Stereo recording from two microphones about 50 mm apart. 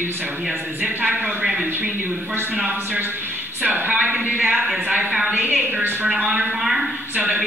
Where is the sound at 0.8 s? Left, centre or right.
Right.